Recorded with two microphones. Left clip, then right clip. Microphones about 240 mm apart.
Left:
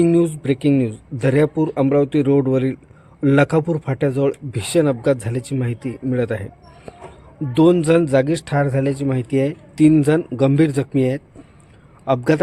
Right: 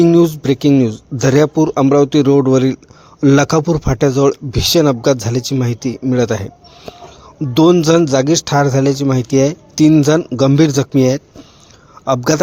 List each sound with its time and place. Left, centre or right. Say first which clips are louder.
0.0 s speech: right 6 dB; centre